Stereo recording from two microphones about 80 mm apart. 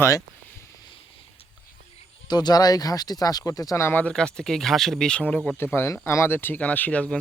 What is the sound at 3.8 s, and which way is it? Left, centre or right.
Speech, left.